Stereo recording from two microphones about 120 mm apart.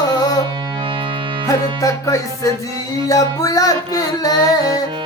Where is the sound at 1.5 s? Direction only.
30° left (ahead or behind).